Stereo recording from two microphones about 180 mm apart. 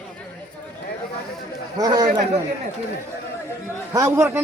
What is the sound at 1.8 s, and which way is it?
Speech, 20° right (ahead or behind).